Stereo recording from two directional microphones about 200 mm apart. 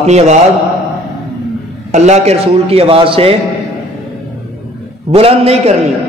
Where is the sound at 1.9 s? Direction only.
35° right (ahead or behind).